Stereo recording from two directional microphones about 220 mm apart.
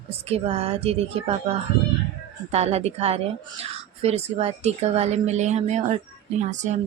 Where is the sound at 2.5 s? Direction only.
30° right (ahead or behind).